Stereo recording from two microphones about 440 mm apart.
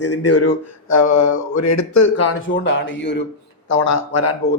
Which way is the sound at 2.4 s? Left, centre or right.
Left.